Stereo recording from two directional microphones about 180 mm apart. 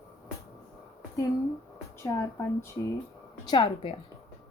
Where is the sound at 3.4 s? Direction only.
30° left (ahead or behind).